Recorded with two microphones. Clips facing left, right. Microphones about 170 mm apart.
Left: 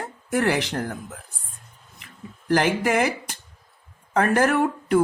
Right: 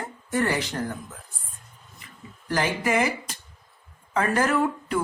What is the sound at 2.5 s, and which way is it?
Speech, 65° left (ahead or behind).